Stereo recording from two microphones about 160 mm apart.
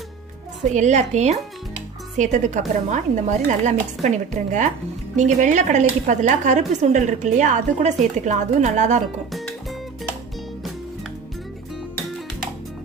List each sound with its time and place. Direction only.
0.7 s a woman's voice: 45° right (ahead or behind)